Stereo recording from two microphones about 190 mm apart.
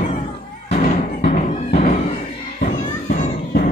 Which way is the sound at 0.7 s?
35° left (ahead or behind).